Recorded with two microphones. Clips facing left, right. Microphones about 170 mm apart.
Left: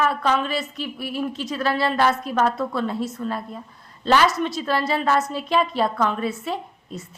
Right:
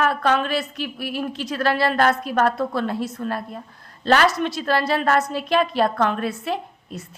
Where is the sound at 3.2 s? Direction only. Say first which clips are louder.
Right 1 dB; 65° right (ahead or behind).